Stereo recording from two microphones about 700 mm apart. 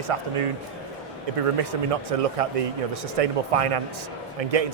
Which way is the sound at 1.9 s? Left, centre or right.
Right.